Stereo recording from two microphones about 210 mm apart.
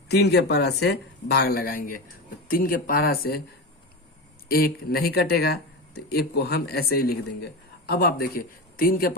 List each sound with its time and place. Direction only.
0.1 s speech: 50° left (ahead or behind)
4.4 s speech: 45° left (ahead or behind)